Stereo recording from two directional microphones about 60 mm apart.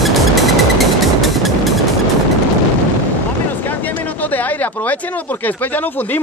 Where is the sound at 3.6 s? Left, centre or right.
Left.